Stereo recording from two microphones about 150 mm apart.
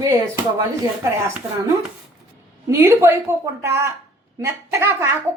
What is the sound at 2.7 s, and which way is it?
A woman's voice, 20° right (ahead or behind).